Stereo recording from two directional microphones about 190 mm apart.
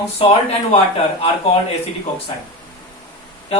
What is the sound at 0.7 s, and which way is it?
Speech, 30° left (ahead or behind).